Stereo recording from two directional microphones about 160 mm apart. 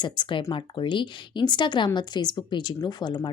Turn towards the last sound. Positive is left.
turn(degrees=25)  # may be behind; listen again after turning